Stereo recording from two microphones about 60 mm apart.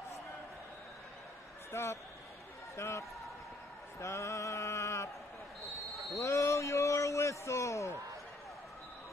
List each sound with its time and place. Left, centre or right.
1.7 s speech: left
4.0 s a sound: left
6.1 s a man's voice: left